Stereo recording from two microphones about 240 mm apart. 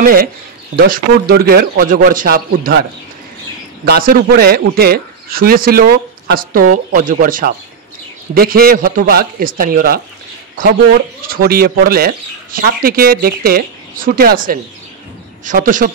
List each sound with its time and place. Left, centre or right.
0.0 s speech: right
3.8 s speech: right
11.2 s speech: right